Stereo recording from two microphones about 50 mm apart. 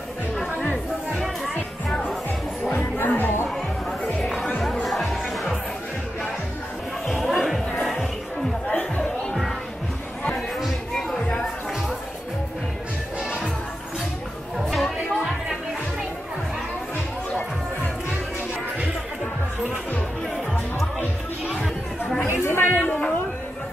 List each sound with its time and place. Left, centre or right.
0.6 s chatter: left
2.7 s music: left
4.2 s music: centre
7.1 s music: centre
8.6 s chatter: left
10.6 s a sound: centre
14.6 s music: centre
22.4 s chatter: left
22.7 s a sound: left